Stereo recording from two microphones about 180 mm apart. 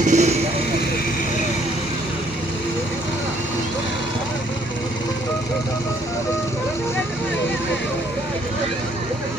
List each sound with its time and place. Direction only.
0.0 s speech: 40° right (ahead or behind)